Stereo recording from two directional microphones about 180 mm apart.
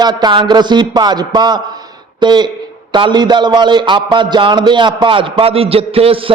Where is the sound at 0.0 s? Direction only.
25° right (ahead or behind).